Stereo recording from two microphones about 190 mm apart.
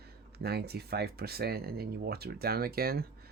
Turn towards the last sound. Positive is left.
turn(degrees=-55)  # may be behind; listen again after turning